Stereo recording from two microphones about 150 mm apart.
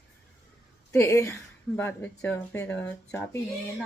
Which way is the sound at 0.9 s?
20° left (ahead or behind).